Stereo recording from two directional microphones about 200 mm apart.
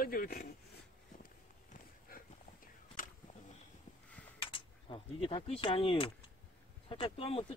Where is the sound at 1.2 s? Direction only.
45° left (ahead or behind).